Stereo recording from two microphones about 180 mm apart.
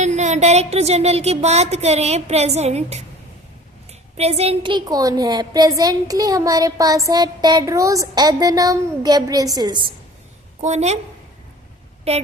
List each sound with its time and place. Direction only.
0.0 s speech: 40° right (ahead or behind)
4.2 s a woman's voice: 35° right (ahead or behind)
10.6 s speech: 40° right (ahead or behind)